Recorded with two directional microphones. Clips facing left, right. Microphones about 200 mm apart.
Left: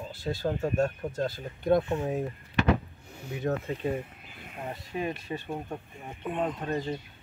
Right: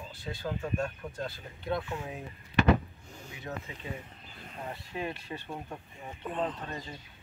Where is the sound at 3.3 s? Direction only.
50° left (ahead or behind).